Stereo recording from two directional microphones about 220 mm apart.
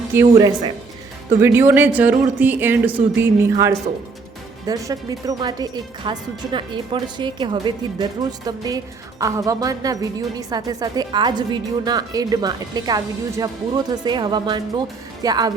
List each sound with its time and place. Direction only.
0.1 s speech: 10° right (ahead or behind)